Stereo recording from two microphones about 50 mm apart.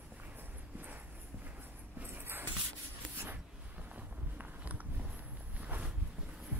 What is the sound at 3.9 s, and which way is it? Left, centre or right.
Walk, right.